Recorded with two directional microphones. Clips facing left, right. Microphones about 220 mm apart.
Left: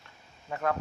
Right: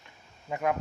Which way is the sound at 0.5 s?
15° right (ahead or behind).